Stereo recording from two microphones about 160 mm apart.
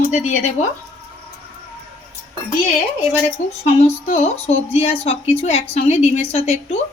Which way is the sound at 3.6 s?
40° left (ahead or behind).